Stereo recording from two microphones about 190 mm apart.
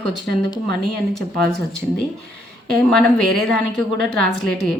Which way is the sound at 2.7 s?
Centre (ahead or behind).